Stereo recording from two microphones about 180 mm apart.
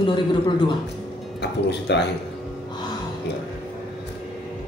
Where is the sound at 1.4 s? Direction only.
70° left (ahead or behind).